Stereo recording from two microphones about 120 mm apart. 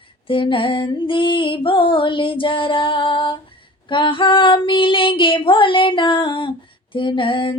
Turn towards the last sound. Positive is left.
turn(degrees=45)  # may be behind; listen again after turning